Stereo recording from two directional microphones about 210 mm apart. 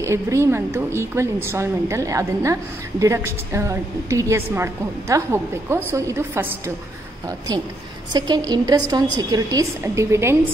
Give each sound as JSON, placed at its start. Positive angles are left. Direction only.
{"t": 0.0, "sound": "a woman's voice", "side_deg": -15}